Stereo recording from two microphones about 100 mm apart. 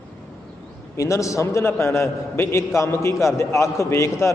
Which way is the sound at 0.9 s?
30° left (ahead or behind).